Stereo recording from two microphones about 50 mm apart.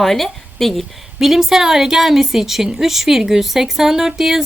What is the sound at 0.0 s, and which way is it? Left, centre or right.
A woman's voice, centre.